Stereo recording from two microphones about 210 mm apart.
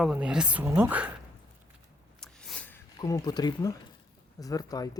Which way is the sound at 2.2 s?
5° left (ahead or behind).